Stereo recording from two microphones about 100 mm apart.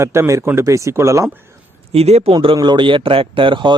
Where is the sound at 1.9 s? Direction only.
90° right.